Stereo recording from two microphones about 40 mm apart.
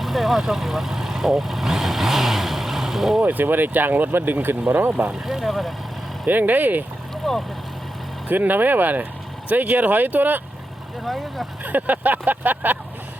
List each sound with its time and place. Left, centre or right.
0.0 s speech: centre
3.2 s speech: right
5.2 s vehicle: centre
6.2 s speech: right
7.2 s speech: centre
8.3 s speech: right
11.0 s speech: centre
11.6 s speech: right